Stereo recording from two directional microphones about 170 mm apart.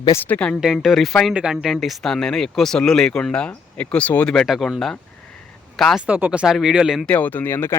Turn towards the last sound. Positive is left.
turn(degrees=15)  # may be behind; listen again after turning